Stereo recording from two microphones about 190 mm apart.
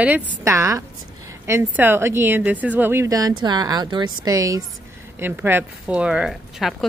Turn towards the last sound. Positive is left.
turn(degrees=0)  # may be behind; listen again after turning